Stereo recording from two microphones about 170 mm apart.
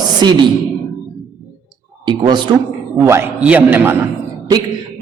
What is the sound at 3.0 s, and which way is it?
Speech, 10° right (ahead or behind).